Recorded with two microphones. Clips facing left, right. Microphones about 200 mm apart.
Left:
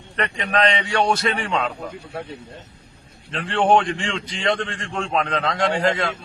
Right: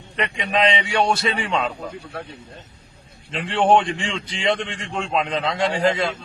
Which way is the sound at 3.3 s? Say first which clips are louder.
Even; centre (ahead or behind).